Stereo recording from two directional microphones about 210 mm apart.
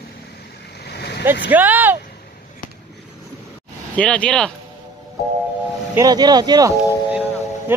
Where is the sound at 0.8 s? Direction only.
50° left (ahead or behind).